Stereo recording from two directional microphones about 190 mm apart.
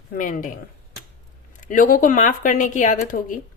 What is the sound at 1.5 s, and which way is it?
Speech, 45° left (ahead or behind).